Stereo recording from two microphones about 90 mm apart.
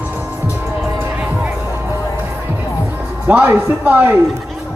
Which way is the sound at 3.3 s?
20° right (ahead or behind).